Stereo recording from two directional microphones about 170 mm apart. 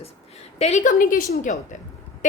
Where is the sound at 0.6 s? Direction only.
40° left (ahead or behind).